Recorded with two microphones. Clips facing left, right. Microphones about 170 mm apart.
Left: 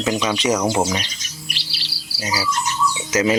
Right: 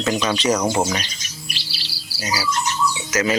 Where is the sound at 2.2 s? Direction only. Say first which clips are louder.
Even; 25° left (ahead or behind).